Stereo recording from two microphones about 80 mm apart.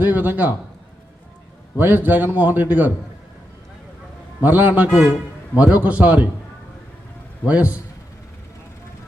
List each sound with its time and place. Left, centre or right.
0.0 s a man's voice: right
1.8 s a man's voice: right
4.4 s a man's voice: right
7.4 s a man's voice: centre